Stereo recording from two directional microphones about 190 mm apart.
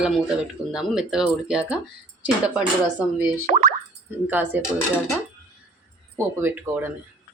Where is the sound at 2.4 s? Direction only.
5° right (ahead or behind).